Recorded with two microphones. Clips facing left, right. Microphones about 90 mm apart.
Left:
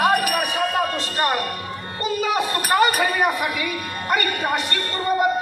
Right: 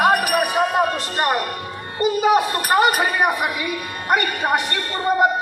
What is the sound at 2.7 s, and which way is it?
Speech, 25° right (ahead or behind).